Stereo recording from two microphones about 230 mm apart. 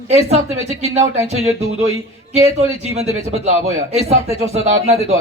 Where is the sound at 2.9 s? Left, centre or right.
Right.